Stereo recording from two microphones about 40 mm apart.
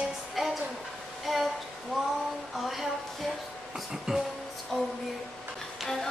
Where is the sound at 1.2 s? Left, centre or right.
Centre.